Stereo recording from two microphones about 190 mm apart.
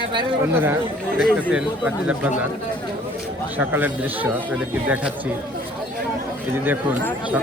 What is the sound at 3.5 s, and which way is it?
Speech, 10° right (ahead or behind).